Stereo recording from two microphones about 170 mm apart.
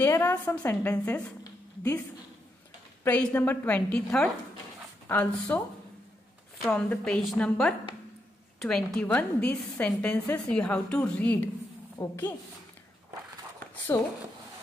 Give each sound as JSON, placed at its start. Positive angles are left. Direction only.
{"t": 0.0, "sound": "a woman's voice", "side_deg": 15}
{"t": 6.6, "sound": "a woman's voice", "side_deg": 5}
{"t": 13.9, "sound": "speech", "side_deg": 25}